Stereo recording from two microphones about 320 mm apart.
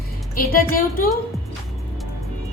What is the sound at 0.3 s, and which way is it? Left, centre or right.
Speech, left.